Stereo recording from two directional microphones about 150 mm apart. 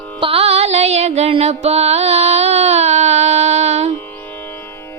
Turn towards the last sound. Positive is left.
turn(degrees=-45)  # may be behind; listen again after turning